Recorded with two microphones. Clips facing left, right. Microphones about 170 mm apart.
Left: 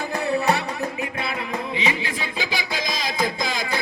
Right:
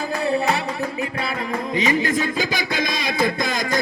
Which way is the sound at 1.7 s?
45° right (ahead or behind).